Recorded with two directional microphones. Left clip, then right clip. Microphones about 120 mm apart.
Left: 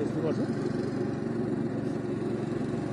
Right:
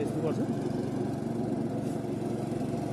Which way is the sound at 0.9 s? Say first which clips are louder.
Left 1 dB; 25° right (ahead or behind).